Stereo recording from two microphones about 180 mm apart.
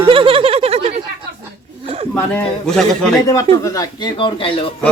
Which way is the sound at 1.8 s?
35° right (ahead or behind).